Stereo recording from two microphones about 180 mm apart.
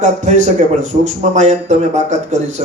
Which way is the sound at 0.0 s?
45° right (ahead or behind).